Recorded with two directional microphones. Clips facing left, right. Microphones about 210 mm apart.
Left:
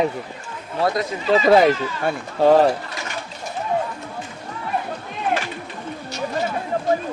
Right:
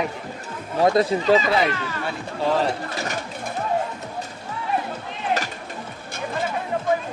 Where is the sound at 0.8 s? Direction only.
30° right (ahead or behind).